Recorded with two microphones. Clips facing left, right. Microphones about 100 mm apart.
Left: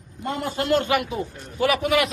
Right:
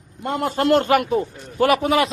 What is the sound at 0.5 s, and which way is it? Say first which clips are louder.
A man's voice: right 5 dB; 45° right (ahead or behind).